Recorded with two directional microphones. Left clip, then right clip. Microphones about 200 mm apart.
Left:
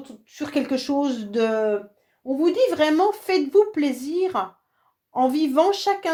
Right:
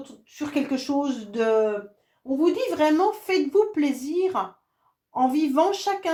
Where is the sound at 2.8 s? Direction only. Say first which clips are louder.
Left 1 dB; 45° left (ahead or behind).